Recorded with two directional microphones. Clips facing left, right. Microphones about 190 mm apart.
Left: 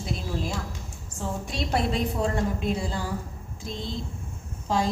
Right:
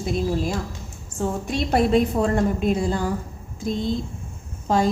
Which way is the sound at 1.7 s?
55° right (ahead or behind).